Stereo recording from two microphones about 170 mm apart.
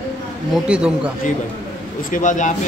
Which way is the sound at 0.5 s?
5° right (ahead or behind).